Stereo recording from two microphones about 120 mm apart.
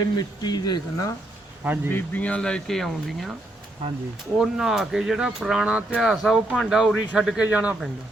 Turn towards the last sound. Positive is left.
turn(degrees=-10)  # may be behind; listen again after turning